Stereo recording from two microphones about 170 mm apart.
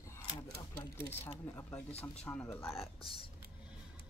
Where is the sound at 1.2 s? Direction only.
10° left (ahead or behind).